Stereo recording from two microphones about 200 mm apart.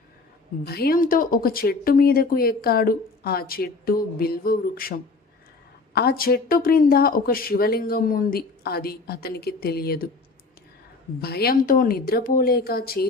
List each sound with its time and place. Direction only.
0.6 s speech: 50° left (ahead or behind)
11.2 s speech: 50° left (ahead or behind)